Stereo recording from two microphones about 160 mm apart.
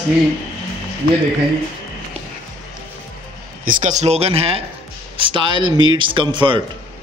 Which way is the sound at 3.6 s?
55° right (ahead or behind).